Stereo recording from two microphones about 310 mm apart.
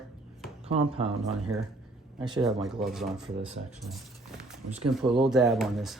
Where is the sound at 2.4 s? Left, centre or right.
Centre.